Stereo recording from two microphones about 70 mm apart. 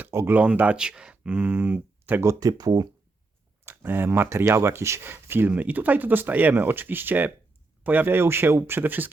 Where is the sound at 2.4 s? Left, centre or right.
Right.